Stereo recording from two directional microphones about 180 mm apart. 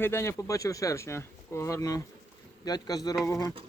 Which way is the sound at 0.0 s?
15° left (ahead or behind).